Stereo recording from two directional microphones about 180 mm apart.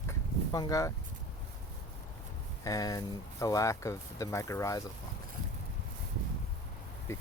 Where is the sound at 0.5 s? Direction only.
20° left (ahead or behind).